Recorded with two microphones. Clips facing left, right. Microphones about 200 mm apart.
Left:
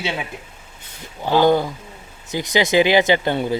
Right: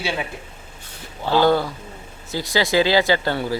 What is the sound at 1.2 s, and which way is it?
Speech, 15° left (ahead or behind).